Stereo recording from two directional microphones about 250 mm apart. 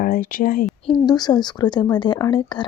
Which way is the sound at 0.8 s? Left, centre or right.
Centre.